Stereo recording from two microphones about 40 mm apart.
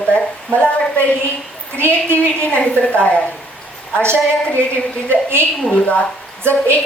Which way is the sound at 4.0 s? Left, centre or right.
Right.